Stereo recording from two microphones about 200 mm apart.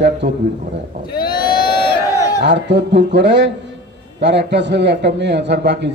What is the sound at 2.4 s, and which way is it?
A man's voice, 60° right (ahead or behind).